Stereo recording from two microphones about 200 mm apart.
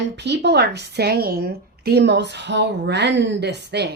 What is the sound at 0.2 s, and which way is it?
A woman's voice, 60° right (ahead or behind).